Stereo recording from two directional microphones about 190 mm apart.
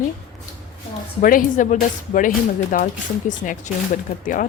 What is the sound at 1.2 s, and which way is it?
Speech, 45° left (ahead or behind).